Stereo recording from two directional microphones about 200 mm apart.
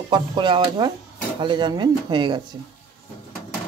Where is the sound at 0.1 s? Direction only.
25° right (ahead or behind).